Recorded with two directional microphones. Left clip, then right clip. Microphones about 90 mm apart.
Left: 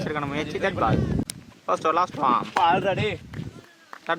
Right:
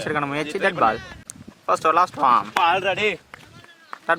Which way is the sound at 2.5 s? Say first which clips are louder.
Right 2 dB; 85° right.